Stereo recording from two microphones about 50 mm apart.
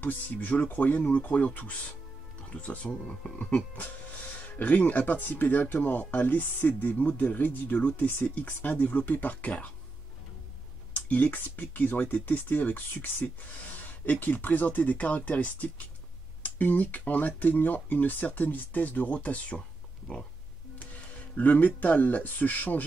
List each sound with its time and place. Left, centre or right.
0.0 s speech: left
10.9 s speech: left
21.4 s speech: left